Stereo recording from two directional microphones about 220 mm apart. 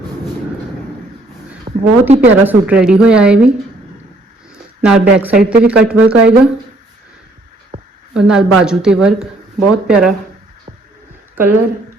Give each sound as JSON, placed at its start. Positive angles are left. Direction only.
{"t": 1.6, "sound": "a woman's voice", "side_deg": -20}
{"t": 2.4, "sound": "speech", "side_deg": -5}
{"t": 4.8, "sound": "speech", "side_deg": -5}
{"t": 8.1, "sound": "speech", "side_deg": -5}